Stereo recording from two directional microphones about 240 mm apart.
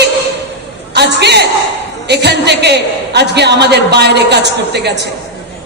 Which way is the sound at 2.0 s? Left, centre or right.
Right.